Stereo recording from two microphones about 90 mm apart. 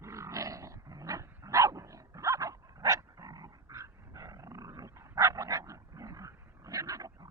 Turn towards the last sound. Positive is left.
turn(degrees=-40)  # may be behind; listen again after turning